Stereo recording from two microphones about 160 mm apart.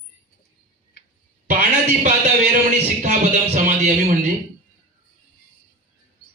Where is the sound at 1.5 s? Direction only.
50° right (ahead or behind).